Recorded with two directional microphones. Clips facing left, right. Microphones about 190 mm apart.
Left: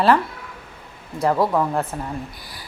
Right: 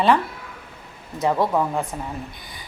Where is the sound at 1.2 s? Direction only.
Centre (ahead or behind).